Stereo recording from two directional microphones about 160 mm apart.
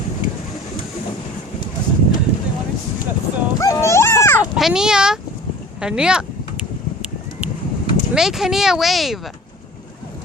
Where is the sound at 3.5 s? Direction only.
20° left (ahead or behind).